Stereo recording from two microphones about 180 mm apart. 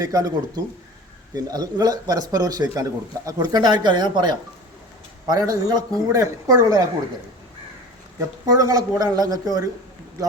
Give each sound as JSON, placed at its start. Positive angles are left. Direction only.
{"t": 0.0, "sound": "speech", "side_deg": -20}
{"t": 8.4, "sound": "speech", "side_deg": -20}